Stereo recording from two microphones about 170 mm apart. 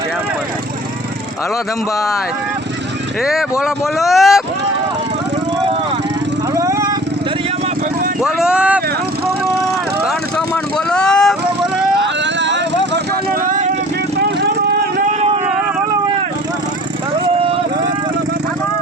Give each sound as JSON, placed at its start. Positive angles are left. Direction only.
{"t": 3.6, "sound": "speech", "side_deg": 0}
{"t": 6.6, "sound": "vehicle", "side_deg": -20}
{"t": 8.2, "sound": "speech", "side_deg": -5}
{"t": 10.8, "sound": "vehicle", "side_deg": 5}
{"t": 11.9, "sound": "vehicle", "side_deg": -90}
{"t": 13.4, "sound": "vehicle", "side_deg": -45}